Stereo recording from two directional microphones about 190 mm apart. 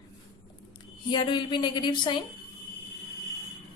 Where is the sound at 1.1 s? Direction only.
25° left (ahead or behind).